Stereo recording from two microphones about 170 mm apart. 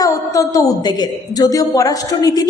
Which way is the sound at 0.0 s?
20° left (ahead or behind).